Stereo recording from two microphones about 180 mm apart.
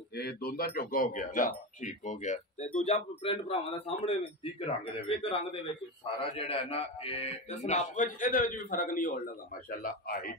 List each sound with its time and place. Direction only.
0.1 s a man's voice: 60° left (ahead or behind)